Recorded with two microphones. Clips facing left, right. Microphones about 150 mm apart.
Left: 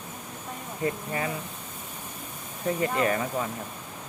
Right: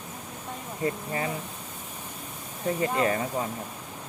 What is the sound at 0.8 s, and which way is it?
Speech, 30° right (ahead or behind).